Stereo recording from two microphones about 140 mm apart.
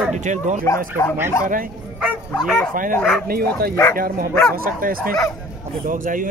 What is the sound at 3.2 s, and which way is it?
Speech, 90° right.